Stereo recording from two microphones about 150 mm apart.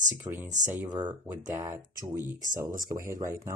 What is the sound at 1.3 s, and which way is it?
Speech, 15° right (ahead or behind).